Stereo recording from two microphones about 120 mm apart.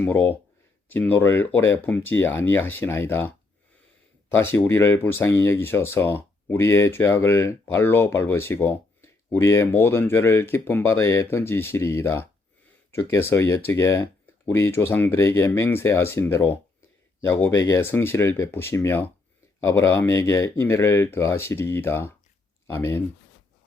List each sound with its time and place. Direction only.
0.0 s speech: 15° left (ahead or behind)